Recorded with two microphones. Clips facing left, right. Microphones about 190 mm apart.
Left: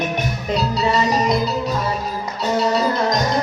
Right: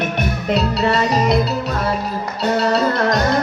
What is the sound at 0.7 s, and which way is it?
Music, 65° right (ahead or behind).